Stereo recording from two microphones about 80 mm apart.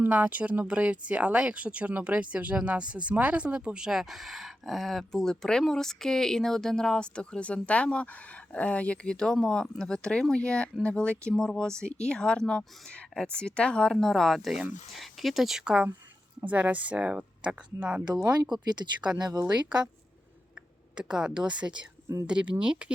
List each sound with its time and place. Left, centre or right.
0.0 s speech: right
19.1 s speech: right
20.9 s speech: centre